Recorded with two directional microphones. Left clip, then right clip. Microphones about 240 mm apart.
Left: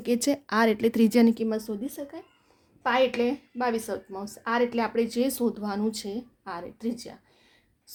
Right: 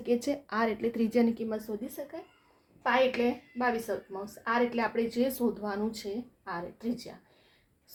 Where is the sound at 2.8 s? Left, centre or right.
Left.